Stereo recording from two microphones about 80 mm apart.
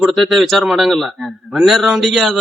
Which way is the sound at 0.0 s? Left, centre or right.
Centre.